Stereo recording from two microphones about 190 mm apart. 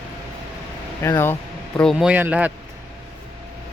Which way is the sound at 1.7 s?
Centre (ahead or behind).